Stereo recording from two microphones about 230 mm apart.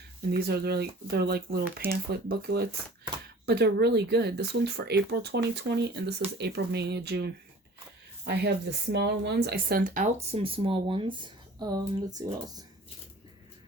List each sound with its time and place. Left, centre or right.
0.3 s speech: right; by 12.6 s centre